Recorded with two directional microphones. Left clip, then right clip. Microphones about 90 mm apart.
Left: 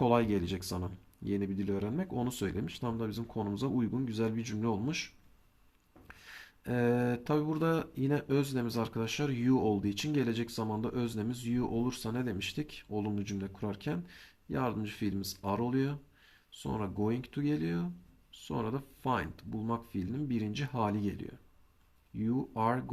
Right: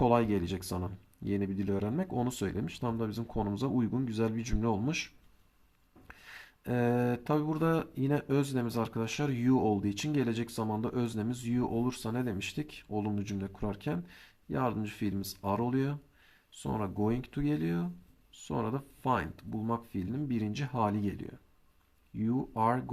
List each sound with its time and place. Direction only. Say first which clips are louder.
0.0 s mantra: right 1 dB; 30° right (ahead or behind)
1.2 s speech: right 1 dB; 45° right (ahead or behind)
6.1 s mantra: right 1 dB; 30° right (ahead or behind)